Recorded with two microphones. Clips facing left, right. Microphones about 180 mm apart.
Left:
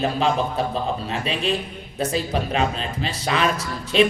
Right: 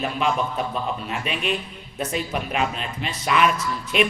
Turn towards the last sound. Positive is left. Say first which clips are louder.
# left 3 dB
turn(degrees=30)  # may be behind; listen again after turning